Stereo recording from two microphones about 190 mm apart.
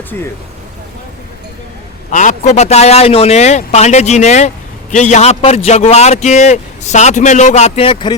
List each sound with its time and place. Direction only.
2.0 s a man's voice: 40° left (ahead or behind)